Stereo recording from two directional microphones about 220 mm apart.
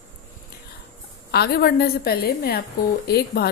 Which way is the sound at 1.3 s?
45° left (ahead or behind).